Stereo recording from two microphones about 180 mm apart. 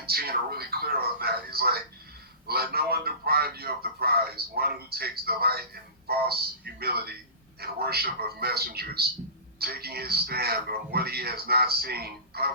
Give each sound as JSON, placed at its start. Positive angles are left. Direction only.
{"t": 0.0, "sound": "a man's voice", "side_deg": -60}